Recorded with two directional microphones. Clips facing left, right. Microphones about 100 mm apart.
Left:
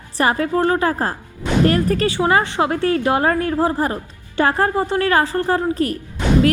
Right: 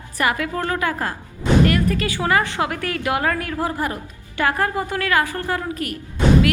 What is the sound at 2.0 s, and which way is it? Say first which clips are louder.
A woman's voice: left 3 dB; 25° left (ahead or behind).